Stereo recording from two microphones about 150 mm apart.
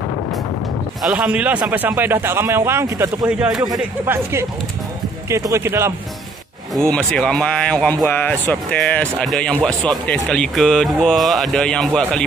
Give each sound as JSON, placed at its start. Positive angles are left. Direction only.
{"t": 1.0, "sound": "a man's voice", "side_deg": -10}
{"t": 3.3, "sound": "speech", "side_deg": -5}
{"t": 4.0, "sound": "a man's voice", "side_deg": -15}
{"t": 6.9, "sound": "speech", "side_deg": 5}